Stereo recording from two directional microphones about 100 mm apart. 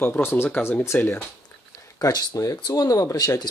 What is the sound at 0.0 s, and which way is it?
Speech, 20° left (ahead or behind).